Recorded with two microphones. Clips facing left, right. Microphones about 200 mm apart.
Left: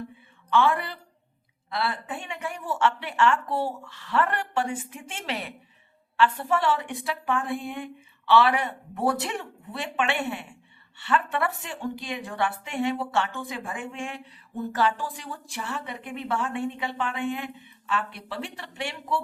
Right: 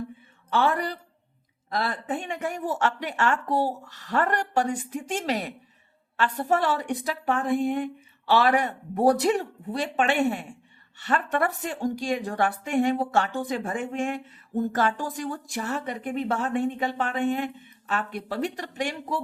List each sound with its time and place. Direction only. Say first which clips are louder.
0.5 s a woman's voice: left 1 dB; 40° right (ahead or behind)